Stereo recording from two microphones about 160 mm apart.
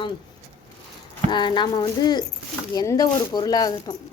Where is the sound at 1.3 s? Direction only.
30° left (ahead or behind).